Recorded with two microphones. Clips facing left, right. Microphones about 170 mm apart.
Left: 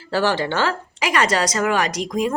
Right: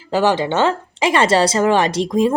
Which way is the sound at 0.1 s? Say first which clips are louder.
Right 4 dB; 20° right (ahead or behind).